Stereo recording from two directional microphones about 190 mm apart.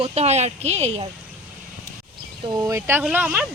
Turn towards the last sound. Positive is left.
turn(degrees=-10)  # may be behind; listen again after turning